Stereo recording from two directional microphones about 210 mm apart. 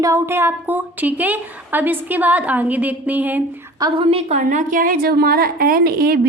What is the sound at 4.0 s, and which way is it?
A woman's voice, 30° right (ahead or behind).